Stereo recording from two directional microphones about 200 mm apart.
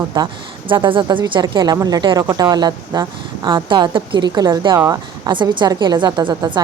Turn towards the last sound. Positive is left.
turn(degrees=-20)  # may be behind; listen again after turning